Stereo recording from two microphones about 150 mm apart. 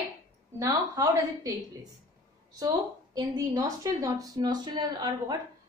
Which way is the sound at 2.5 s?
25° right (ahead or behind).